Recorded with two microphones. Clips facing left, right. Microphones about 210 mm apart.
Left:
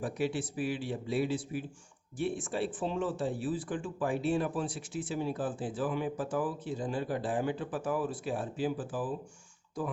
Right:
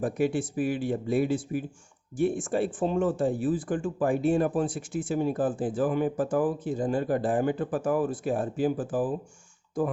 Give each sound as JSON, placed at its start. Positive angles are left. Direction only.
{"t": 0.0, "sound": "speech", "side_deg": -50}